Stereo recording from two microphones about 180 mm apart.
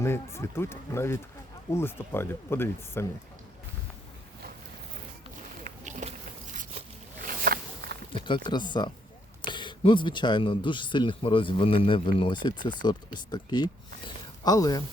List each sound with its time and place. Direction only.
0.0 s speech: 15° left (ahead or behind)
5.6 s a sound: 40° right (ahead or behind); by 7.9 s 60° right (ahead or behind)
8.1 s speech: 25° left (ahead or behind)